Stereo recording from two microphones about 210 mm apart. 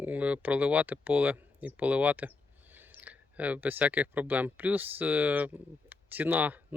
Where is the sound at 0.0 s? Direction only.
5° right (ahead or behind).